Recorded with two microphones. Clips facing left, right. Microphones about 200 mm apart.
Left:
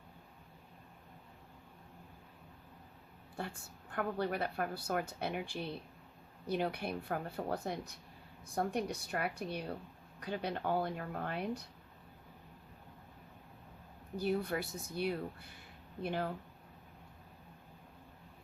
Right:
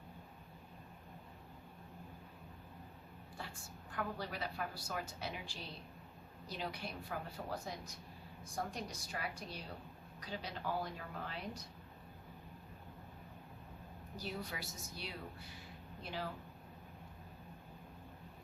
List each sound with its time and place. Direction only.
3.3 s a woman's voice: 55° left (ahead or behind)
14.2 s a woman's voice: 55° left (ahead or behind)